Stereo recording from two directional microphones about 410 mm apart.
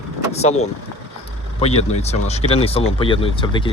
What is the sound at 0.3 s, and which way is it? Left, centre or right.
Speech, centre.